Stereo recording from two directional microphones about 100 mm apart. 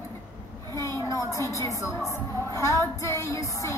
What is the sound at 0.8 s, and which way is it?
A woman's voice, 25° left (ahead or behind).